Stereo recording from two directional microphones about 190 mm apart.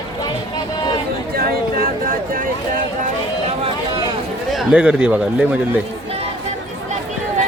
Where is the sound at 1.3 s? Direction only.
50° right (ahead or behind).